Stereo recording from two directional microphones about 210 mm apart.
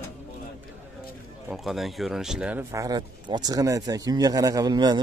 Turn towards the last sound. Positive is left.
turn(degrees=-20)  # may be behind; listen again after turning